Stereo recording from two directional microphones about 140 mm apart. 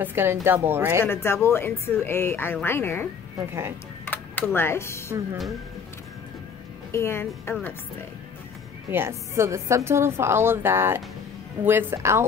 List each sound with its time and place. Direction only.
0.0 s a woman's voice: 15° right (ahead or behind)
1.0 s speech: 15° left (ahead or behind)
3.3 s a woman's voice: 20° right (ahead or behind)
4.0 s a sound: 15° left (ahead or behind)
6.9 s speech: 20° left (ahead or behind)
8.9 s a woman's voice: 20° right (ahead or behind)